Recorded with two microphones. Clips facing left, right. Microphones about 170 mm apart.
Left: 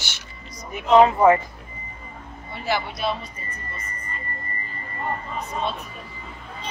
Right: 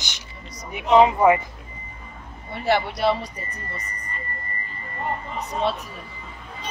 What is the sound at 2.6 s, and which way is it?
Speech, 65° right (ahead or behind).